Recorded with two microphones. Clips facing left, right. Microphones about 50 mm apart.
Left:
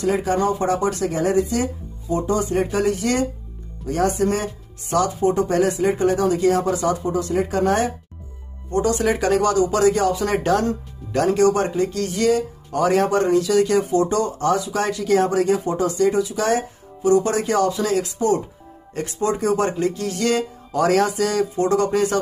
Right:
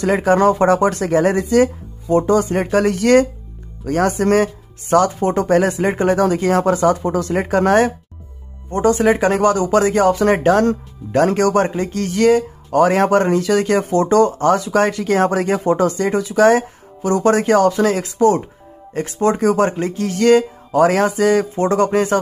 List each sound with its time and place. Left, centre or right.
0.0 s speech: right
1.4 s speech: right
7.0 s speech: right
8.6 s speech: right